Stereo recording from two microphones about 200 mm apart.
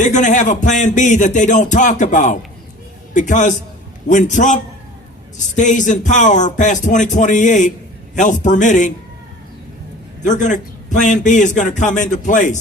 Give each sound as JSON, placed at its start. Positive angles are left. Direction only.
{"t": 0.0, "sound": "music", "side_deg": 40}
{"t": 10.2, "sound": "music", "side_deg": 40}